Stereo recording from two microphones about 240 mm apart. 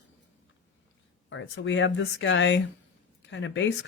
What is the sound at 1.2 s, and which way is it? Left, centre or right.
Speech, left.